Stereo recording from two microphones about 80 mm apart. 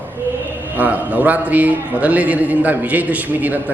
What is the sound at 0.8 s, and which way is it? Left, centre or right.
A man's voice, centre.